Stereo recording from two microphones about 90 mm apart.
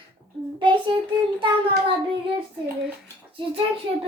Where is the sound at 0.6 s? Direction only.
65° right (ahead or behind).